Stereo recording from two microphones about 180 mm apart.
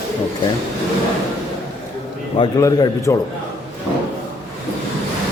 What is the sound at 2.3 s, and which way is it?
Speech, 20° left (ahead or behind).